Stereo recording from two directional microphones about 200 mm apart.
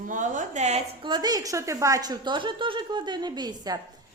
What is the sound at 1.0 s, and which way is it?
A woman's voice, 20° right (ahead or behind).